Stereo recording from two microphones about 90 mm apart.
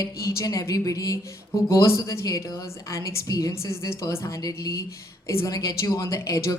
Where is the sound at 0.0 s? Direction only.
35° left (ahead or behind).